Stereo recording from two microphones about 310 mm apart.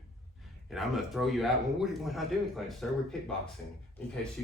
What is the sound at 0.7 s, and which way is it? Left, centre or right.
Speech, centre.